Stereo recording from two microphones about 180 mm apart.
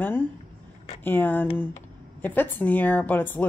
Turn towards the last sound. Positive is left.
turn(degrees=10)  # may be behind; listen again after turning